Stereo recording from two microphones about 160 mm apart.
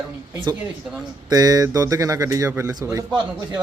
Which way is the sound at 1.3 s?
25° right (ahead or behind).